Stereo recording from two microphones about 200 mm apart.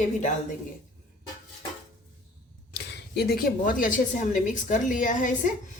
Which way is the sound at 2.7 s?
55° left (ahead or behind).